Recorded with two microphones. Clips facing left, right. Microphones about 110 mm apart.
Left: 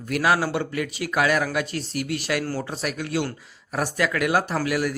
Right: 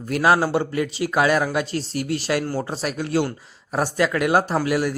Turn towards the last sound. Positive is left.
turn(degrees=-30)  # may be behind; listen again after turning